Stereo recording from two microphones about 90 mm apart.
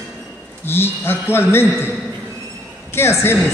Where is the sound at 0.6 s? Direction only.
25° left (ahead or behind).